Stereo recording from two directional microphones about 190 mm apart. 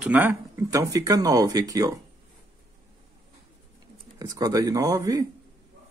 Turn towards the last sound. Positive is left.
turn(degrees=-20)  # may be behind; listen again after turning